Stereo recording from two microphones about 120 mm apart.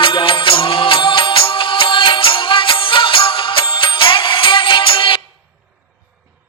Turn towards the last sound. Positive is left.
turn(degrees=45)  # may be behind; listen again after turning